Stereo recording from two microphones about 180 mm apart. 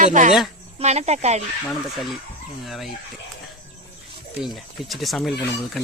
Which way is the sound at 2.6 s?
Centre (ahead or behind).